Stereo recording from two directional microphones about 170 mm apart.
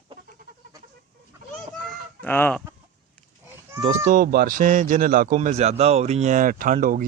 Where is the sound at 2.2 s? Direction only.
10° left (ahead or behind).